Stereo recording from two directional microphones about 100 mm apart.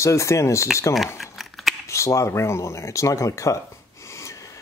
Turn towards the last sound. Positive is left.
turn(degrees=30)  # may be behind; listen again after turning